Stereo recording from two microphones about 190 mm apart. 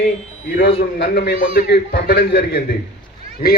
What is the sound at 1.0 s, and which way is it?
A man's voice, 60° left (ahead or behind).